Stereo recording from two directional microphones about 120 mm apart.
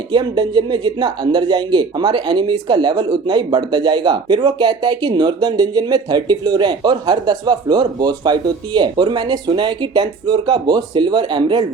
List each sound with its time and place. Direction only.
0.1 s speech: 40° right (ahead or behind)